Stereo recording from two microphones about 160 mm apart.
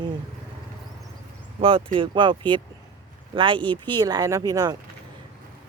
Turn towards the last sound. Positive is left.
turn(degrees=-25)  # may be behind; listen again after turning